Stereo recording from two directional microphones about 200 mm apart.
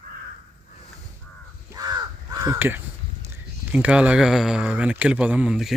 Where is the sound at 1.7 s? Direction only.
20° right (ahead or behind).